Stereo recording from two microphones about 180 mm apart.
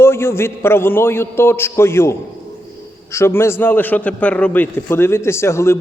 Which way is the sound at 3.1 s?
15° left (ahead or behind).